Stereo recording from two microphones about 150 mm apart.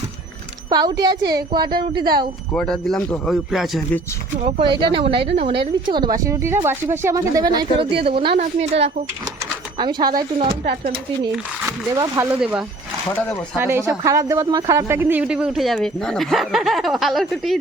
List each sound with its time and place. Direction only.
0.7 s speech: 25° right (ahead or behind)
2.5 s speech: 5° left (ahead or behind)
4.4 s a woman's voice: 35° right (ahead or behind)
9.7 s speech: 30° right (ahead or behind)
10.6 s speech: 60° right (ahead or behind)
11.9 s speech: 20° right (ahead or behind)
12.3 s speech: 5° right (ahead or behind)
13.6 s speech: 15° right (ahead or behind); by 17.6 s centre (ahead or behind)